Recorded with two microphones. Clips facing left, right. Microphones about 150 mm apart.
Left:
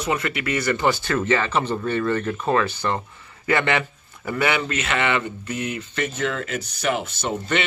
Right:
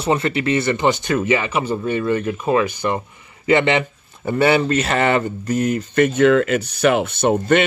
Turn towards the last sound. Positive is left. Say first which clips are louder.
# right 9 dB
turn(degrees=-55)  # may be behind; listen again after turning